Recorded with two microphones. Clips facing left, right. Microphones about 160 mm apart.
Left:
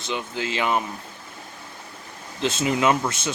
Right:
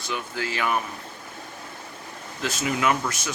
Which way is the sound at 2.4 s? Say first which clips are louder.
Left 3 dB; 25° left (ahead or behind).